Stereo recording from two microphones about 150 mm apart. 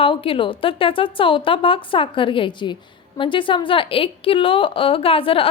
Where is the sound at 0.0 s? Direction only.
35° left (ahead or behind).